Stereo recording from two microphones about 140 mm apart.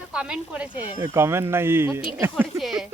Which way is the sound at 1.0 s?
20° right (ahead or behind).